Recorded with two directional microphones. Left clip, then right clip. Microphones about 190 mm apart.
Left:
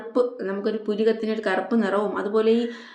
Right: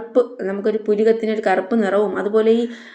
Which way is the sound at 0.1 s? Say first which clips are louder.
Right 5 dB; 15° right (ahead or behind).